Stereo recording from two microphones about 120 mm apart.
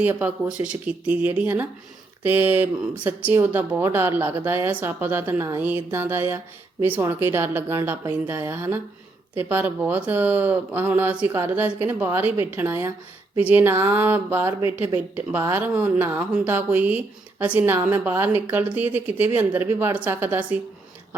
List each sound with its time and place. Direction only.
0.0 s speech: 15° right (ahead or behind)